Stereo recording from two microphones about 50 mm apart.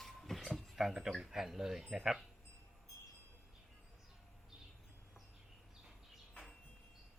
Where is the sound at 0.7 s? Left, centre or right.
Centre.